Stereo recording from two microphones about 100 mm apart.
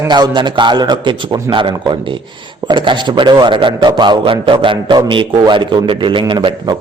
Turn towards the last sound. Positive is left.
turn(degrees=-50)  # may be behind; listen again after turning